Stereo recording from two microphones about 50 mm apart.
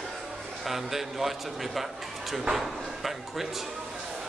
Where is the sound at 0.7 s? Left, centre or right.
Centre.